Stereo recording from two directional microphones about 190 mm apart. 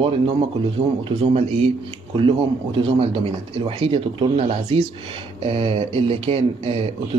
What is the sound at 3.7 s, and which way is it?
A man's voice, 30° right (ahead or behind).